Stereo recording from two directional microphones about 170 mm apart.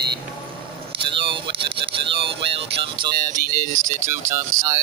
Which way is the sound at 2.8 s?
30° right (ahead or behind).